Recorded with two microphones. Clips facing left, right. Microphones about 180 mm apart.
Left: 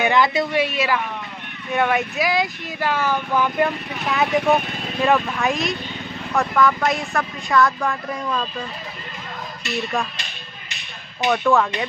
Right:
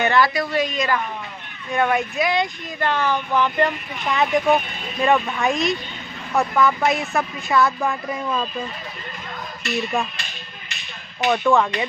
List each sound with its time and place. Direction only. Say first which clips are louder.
0.0 s a woman's voice: left 1 dB; 20° left (ahead or behind)
0.5 s a woman's voice: left 1 dB; 10° left (ahead or behind)
11.2 s speech: even; centre (ahead or behind)